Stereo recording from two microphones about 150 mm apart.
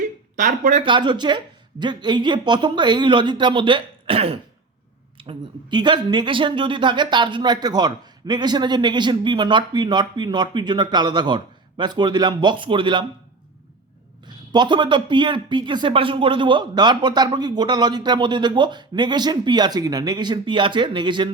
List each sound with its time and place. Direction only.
0.3 s speech: 60° right (ahead or behind)
0.9 s speech: 30° right (ahead or behind)
14.3 s speech: 30° right (ahead or behind)